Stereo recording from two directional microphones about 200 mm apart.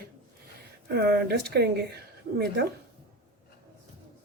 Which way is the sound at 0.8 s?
55° right (ahead or behind).